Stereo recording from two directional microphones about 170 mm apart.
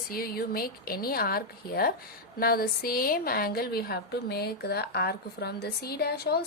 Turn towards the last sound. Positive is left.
turn(degrees=65)  # may be behind; listen again after turning